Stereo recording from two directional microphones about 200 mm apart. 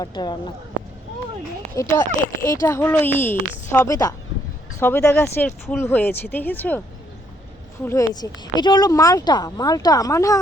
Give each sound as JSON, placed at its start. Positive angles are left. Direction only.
{"t": 0.0, "sound": "speech", "side_deg": 20}
{"t": 1.7, "sound": "speech", "side_deg": 15}
{"t": 8.1, "sound": "speech", "side_deg": 20}